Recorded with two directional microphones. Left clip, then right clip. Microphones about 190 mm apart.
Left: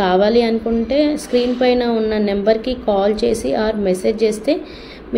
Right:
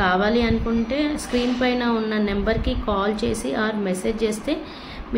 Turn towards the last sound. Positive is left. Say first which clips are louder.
# left 7 dB
turn(degrees=15)  # may be behind; listen again after turning